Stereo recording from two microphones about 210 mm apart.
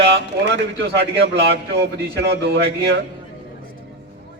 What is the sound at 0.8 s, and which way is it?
A man's voice, 55° right (ahead or behind).